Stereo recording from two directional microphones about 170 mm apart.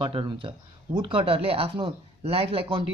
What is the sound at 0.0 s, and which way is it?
Speech, 30° right (ahead or behind).